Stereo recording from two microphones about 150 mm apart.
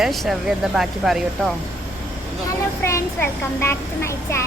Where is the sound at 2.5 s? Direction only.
20° left (ahead or behind).